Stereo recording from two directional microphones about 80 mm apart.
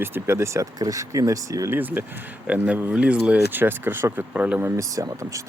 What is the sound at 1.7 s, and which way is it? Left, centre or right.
Speech, right.